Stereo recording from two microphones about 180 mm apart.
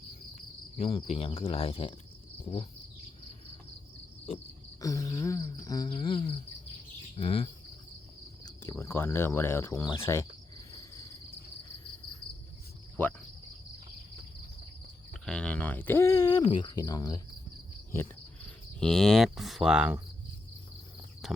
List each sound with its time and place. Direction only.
0.8 s speech: 35° left (ahead or behind)
4.8 s cricket: 20° left (ahead or behind)
7.2 s speech: 30° left (ahead or behind)
8.4 s speech: 15° left (ahead or behind)
15.1 s a sound: 5° left (ahead or behind); by 17.2 s 20° left (ahead or behind)
18.8 s speech: 5° left (ahead or behind)
21.2 s a sound: centre (ahead or behind)